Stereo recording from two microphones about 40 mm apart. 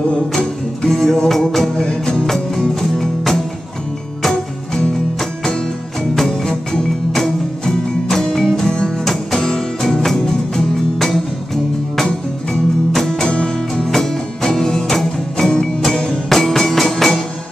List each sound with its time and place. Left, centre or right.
0.8 s music: centre
2.2 s music: centre
6.1 s music: centre
13.8 s music: centre